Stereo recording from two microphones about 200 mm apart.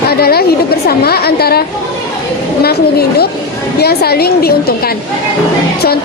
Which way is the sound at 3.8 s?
50° left (ahead or behind).